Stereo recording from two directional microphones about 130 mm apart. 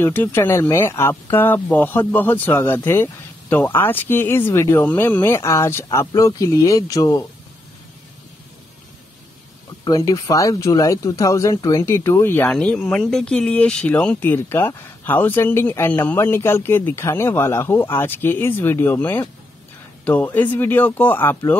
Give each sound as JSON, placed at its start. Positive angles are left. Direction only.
{"t": 0.0, "sound": "speech", "side_deg": 15}
{"t": 9.8, "sound": "speech", "side_deg": 25}